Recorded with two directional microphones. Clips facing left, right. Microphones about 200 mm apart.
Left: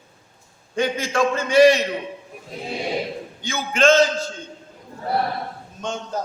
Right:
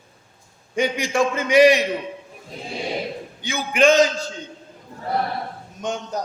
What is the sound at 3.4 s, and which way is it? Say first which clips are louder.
Speech: right 2 dB; 15° right (ahead or behind).